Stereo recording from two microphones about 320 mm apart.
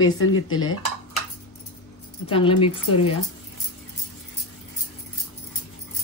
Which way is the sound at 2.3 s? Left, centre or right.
Centre.